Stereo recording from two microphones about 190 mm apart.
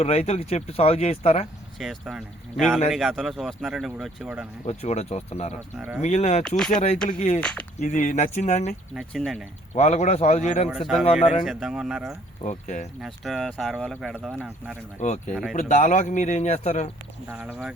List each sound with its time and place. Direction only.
0.0 s speech: 35° left (ahead or behind)
1.8 s speech: centre (ahead or behind)
4.6 s speech: 35° left (ahead or behind)
5.7 s speech: 10° right (ahead or behind)
6.0 s speech: 40° left (ahead or behind)
9.0 s speech: centre (ahead or behind)
9.7 s speech: 35° left (ahead or behind)
10.7 s speech: centre (ahead or behind)
11.0 s speech: 30° left (ahead or behind)
11.4 s speech: 5° right (ahead or behind)
12.4 s speech: 40° left (ahead or behind)
13.0 s speech: centre (ahead or behind)
15.0 s speech: 40° left (ahead or behind)
17.2 s speech: 10° right (ahead or behind)